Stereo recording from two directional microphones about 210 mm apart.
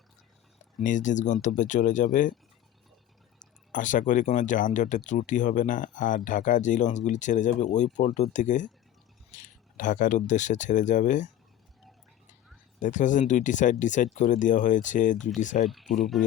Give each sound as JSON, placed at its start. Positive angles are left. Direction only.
{"t": 0.8, "sound": "speech", "side_deg": 35}
{"t": 3.4, "sound": "speech", "side_deg": 35}
{"t": 12.8, "sound": "speech", "side_deg": 35}
{"t": 15.6, "sound": "speech", "side_deg": 0}